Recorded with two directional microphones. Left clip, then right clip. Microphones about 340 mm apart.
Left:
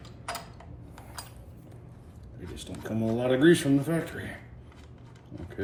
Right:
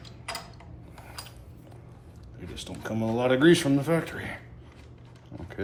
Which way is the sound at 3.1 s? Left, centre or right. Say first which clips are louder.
Right 2 dB; centre.